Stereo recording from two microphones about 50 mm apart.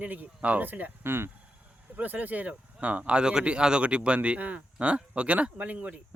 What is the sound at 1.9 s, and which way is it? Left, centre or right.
Speech, right.